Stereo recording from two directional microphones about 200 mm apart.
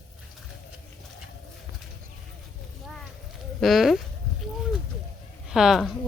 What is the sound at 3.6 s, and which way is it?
Speech, centre (ahead or behind).